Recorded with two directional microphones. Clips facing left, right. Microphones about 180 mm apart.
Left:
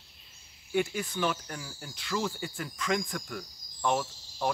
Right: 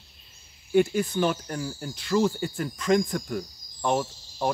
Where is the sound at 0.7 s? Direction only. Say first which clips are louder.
Right 8 dB; 40° right (ahead or behind).